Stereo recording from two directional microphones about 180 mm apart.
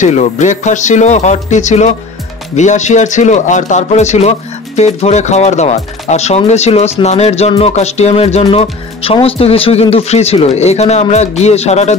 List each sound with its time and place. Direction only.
0.0 s speech: 40° left (ahead or behind)